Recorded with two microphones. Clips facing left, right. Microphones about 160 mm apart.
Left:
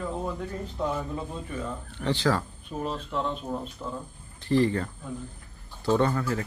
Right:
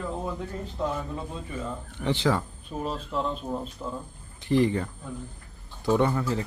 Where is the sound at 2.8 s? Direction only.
5° right (ahead or behind).